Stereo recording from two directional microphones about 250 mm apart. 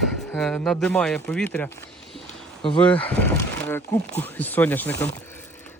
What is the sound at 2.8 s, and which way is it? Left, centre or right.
Speech, centre.